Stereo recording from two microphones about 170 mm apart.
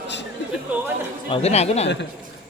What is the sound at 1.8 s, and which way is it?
Speech, 90° left.